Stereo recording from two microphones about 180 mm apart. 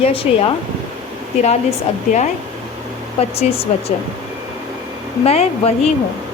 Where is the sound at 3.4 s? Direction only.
35° left (ahead or behind).